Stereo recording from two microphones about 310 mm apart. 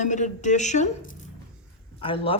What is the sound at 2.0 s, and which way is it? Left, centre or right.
Speech, centre.